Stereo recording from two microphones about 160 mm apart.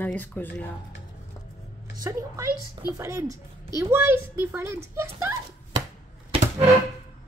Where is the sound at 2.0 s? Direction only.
20° right (ahead or behind).